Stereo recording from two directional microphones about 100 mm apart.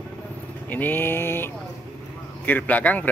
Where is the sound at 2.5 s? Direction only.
15° left (ahead or behind).